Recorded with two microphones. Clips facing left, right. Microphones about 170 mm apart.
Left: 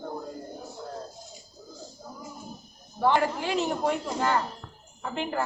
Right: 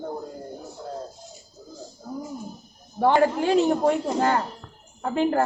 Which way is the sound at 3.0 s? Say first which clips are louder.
Right 5 dB; 45° right (ahead or behind).